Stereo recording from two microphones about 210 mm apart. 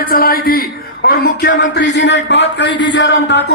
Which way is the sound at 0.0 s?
45° left (ahead or behind).